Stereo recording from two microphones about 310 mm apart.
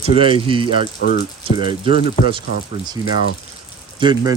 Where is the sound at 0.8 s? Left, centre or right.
Left.